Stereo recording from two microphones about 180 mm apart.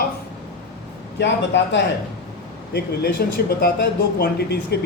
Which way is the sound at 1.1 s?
75° left (ahead or behind).